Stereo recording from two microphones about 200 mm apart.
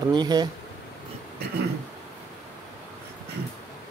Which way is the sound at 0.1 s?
20° right (ahead or behind).